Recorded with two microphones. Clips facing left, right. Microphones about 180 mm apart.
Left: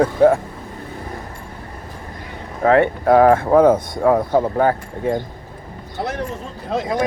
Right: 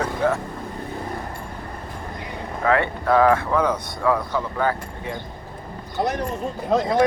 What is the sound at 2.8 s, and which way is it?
Speech, 45° left (ahead or behind).